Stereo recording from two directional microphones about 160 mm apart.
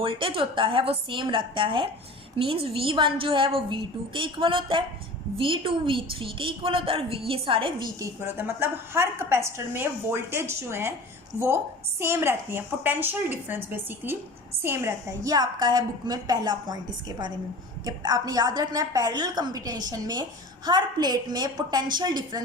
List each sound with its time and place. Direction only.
0.0 s a woman's voice: 35° right (ahead or behind)
7.9 s a woman's voice: 15° right (ahead or behind)